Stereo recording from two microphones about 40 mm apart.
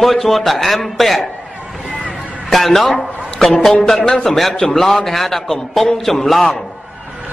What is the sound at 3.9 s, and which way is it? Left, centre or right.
Speech, centre.